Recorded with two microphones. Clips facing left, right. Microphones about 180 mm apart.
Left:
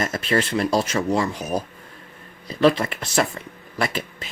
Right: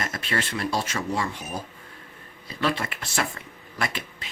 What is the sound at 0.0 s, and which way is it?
Speech, 40° left (ahead or behind).